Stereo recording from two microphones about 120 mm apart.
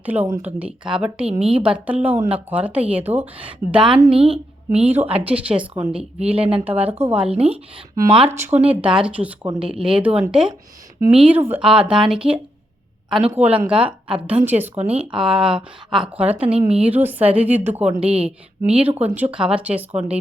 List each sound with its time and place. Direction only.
0.0 s speech: 15° right (ahead or behind)
1.3 s a woman's voice: 60° right (ahead or behind)
1.5 s speech: 10° right (ahead or behind)
13.3 s speech: 15° right (ahead or behind)